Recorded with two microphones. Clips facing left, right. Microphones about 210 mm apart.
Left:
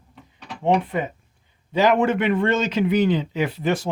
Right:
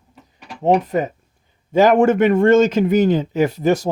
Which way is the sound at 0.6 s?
40° right (ahead or behind).